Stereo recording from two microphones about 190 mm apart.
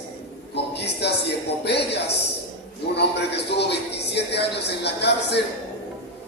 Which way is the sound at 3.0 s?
60° left (ahead or behind).